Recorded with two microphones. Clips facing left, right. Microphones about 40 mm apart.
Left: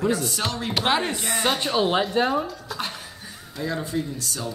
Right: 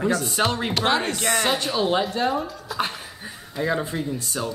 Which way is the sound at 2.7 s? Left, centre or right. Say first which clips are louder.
Right 4 dB; centre.